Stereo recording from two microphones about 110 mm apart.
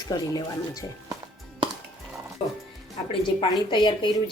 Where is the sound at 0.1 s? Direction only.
35° left (ahead or behind).